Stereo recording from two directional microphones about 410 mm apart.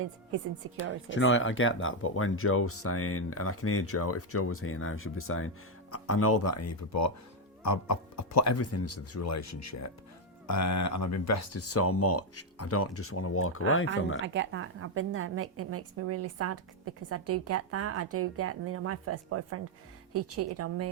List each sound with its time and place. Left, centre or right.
1.1 s speech: left
14.3 s a woman's voice: right